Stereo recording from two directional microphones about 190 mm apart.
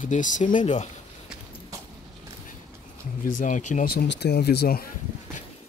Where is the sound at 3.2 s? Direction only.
40° left (ahead or behind).